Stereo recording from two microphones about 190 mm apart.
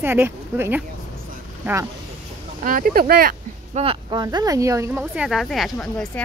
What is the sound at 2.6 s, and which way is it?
Speech, 45° right (ahead or behind).